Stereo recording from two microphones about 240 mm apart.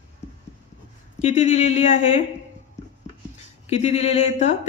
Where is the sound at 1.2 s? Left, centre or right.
Left.